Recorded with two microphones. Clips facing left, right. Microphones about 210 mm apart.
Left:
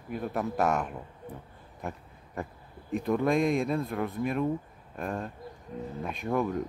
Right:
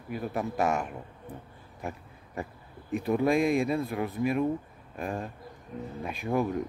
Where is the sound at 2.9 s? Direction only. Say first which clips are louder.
Right 1 dB; 5° right (ahead or behind).